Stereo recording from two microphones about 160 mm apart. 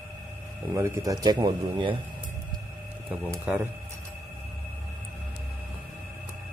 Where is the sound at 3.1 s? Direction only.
10° right (ahead or behind).